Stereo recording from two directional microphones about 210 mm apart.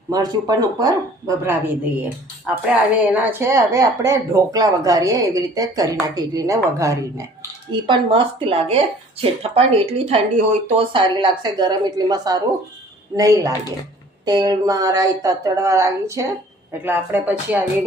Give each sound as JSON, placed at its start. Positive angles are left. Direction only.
{"t": 0.1, "sound": "a woman's voice", "side_deg": -20}